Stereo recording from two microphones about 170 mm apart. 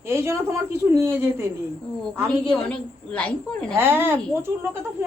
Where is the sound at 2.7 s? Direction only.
5° left (ahead or behind).